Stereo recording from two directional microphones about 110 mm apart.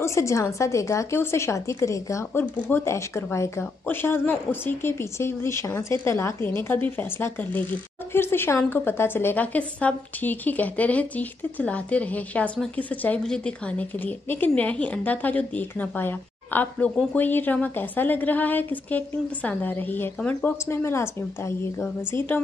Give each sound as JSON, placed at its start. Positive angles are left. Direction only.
{"t": 0.0, "sound": "a woman's voice", "side_deg": 25}